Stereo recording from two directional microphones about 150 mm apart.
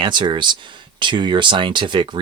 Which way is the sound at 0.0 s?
30° right (ahead or behind).